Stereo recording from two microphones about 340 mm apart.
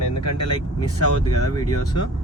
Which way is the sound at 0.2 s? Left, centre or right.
Left.